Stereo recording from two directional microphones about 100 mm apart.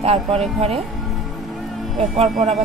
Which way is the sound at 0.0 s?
90° right.